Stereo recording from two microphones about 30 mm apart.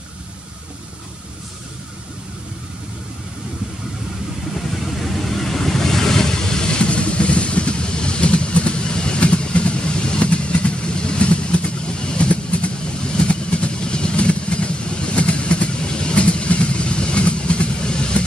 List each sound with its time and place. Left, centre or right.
4.6 s vehicle: centre; by 6.6 s left
6.7 s vehicle: left
12.3 s vehicle: left